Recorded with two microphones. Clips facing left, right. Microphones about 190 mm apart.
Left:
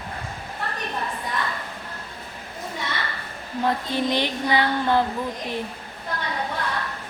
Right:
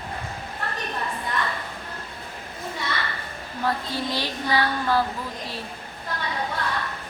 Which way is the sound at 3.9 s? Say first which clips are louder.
Left 5 dB; 20° left (ahead or behind).